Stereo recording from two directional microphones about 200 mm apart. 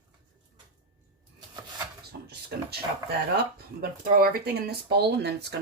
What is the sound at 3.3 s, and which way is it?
Speech, 50° right (ahead or behind).